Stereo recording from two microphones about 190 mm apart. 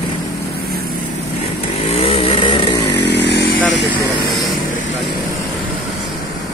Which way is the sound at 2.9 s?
65° left (ahead or behind).